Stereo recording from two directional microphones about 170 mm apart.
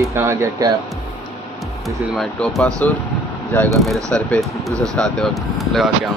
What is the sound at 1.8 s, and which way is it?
Speech, centre (ahead or behind).